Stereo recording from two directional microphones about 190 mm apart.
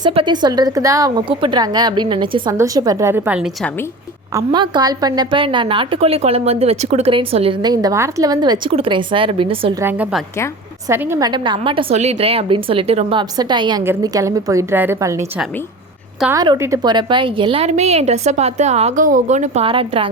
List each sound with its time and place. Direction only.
0.0 s a woman's voice: 25° right (ahead or behind)
4.4 s a woman's voice: 25° right (ahead or behind)
9.8 s a woman's voice: 10° right (ahead or behind)
11.3 s a woman's voice: 25° right (ahead or behind)